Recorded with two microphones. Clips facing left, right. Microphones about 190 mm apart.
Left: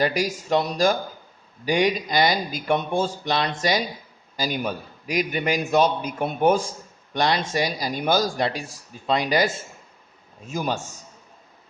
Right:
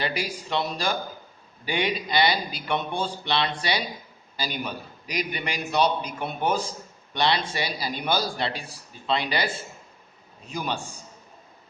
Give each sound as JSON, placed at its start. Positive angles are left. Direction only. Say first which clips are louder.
{"t": 0.0, "sound": "a man's voice", "louder": "left 6 dB", "side_deg": 45}